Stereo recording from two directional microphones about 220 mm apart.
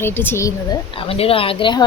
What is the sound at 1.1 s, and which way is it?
Speech, 25° left (ahead or behind).